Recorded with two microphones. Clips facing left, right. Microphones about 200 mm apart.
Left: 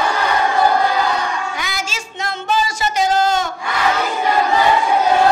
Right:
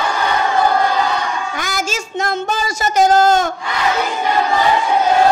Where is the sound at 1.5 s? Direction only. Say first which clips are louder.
Right 4 dB; 45° right (ahead or behind).